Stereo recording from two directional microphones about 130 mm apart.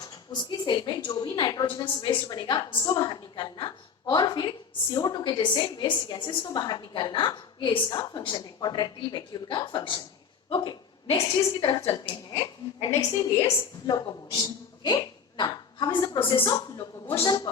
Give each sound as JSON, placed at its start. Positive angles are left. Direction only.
{"t": 0.0, "sound": "a woman's voice", "side_deg": 35}
{"t": 11.4, "sound": "a woman's voice", "side_deg": 25}
{"t": 17.2, "sound": "a woman's voice", "side_deg": 30}